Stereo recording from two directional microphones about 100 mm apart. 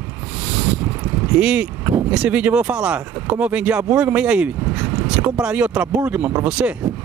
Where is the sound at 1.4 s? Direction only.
10° right (ahead or behind).